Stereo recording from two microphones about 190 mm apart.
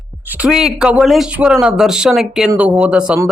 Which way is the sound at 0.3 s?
5° right (ahead or behind).